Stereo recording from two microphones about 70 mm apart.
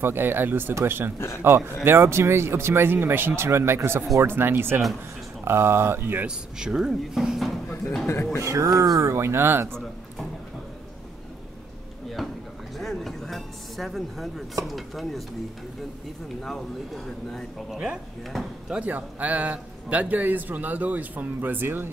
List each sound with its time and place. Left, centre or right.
0.0 s speech: right
6.2 s speech: centre
8.1 s speech: left
8.5 s speech: right
9.1 s speech: right
9.7 s a sound: centre
12.2 s a sound: centre
14.6 s speech: centre
16.4 s speech: centre
17.6 s speech: centre
18.9 s a man's voice: right